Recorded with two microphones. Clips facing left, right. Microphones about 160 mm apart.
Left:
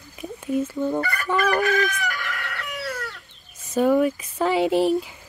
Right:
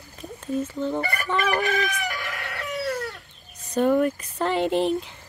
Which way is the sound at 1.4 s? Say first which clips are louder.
Left 3 dB; centre (ahead or behind).